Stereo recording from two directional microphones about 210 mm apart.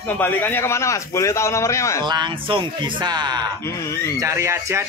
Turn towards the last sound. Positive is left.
turn(degrees=-15)  # may be behind; listen again after turning